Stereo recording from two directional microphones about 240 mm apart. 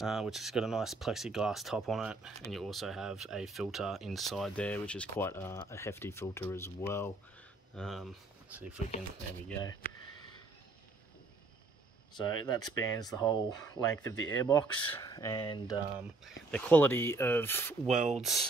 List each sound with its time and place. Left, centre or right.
0.0 s speech: centre
12.4 s speech: centre
16.0 s speech: centre
17.8 s speech: right
18.2 s speech: centre